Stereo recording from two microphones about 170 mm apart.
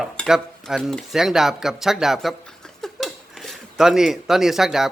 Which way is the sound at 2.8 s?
Centre (ahead or behind).